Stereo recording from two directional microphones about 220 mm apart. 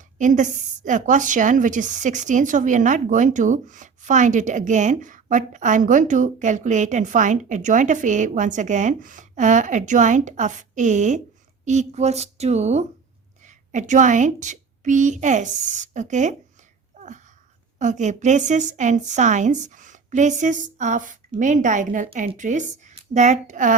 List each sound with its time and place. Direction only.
0.2 s speech: 35° right (ahead or behind)
17.7 s speech: 35° right (ahead or behind)